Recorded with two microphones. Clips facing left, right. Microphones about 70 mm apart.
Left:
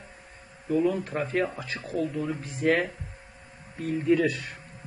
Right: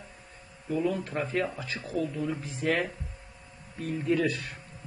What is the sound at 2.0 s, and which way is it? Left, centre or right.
Speech, centre.